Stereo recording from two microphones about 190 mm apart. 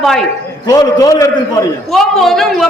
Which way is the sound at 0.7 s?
20° left (ahead or behind).